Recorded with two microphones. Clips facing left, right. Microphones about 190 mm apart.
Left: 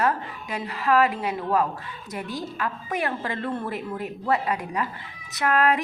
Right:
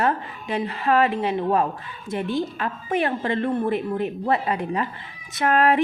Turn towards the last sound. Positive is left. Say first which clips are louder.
# right 3 dB
turn(degrees=-30)  # may be behind; listen again after turning